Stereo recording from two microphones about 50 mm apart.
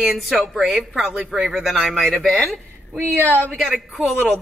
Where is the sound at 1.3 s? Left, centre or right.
Centre.